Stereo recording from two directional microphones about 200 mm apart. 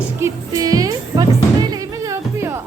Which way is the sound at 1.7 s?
15° right (ahead or behind).